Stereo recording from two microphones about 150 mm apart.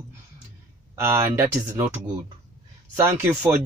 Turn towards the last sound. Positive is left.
turn(degrees=-10)  # may be behind; listen again after turning